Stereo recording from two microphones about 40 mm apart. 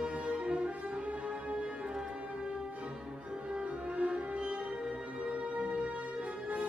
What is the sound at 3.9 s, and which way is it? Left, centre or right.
Music, right.